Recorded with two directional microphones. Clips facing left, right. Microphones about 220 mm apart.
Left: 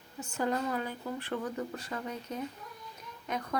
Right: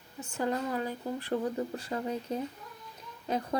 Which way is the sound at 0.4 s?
30° right (ahead or behind).